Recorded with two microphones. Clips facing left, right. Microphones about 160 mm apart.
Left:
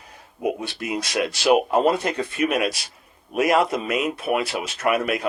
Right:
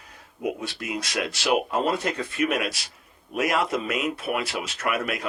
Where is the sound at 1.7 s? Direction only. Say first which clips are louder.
Left 5 dB; 15° left (ahead or behind).